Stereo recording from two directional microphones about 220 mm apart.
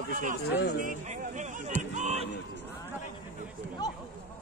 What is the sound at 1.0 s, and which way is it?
Speech, 35° right (ahead or behind).